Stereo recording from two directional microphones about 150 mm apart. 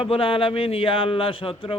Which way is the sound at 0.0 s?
35° left (ahead or behind).